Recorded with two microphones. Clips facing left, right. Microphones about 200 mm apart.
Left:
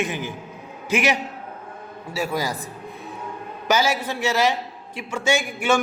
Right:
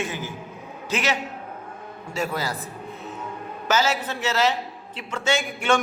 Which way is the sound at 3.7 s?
10° left (ahead or behind).